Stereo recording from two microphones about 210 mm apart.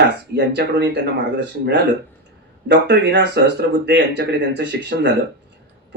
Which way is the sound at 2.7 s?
55° right (ahead or behind).